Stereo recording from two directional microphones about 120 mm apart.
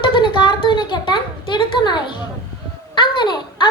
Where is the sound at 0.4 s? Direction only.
40° left (ahead or behind).